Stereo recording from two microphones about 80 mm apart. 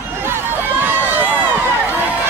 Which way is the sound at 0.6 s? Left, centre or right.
Right.